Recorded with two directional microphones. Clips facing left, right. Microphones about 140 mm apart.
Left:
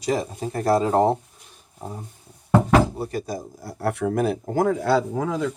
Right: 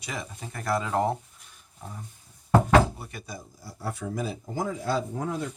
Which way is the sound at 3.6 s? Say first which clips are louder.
Left 10 dB; 65° left (ahead or behind).